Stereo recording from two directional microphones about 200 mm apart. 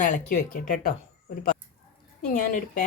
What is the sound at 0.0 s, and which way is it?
Speech, 40° left (ahead or behind).